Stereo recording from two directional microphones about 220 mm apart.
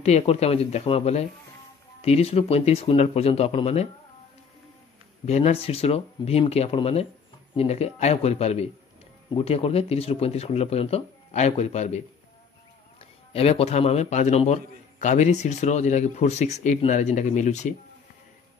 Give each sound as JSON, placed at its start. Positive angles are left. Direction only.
{"t": 0.0, "sound": "speech", "side_deg": 30}
{"t": 5.2, "sound": "speech", "side_deg": 30}
{"t": 13.0, "sound": "a man's voice", "side_deg": 25}